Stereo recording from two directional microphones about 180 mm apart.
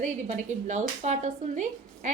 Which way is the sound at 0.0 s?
40° right (ahead or behind).